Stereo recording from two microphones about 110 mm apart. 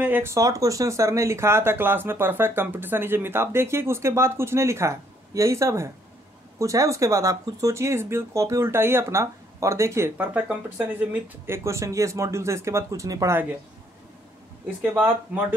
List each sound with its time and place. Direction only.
0.0 s speech: 20° right (ahead or behind)